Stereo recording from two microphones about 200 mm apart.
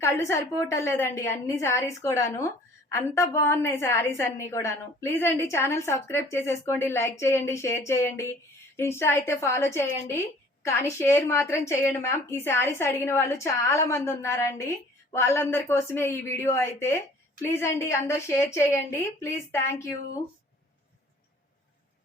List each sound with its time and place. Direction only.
0.0 s a woman's voice: 15° left (ahead or behind)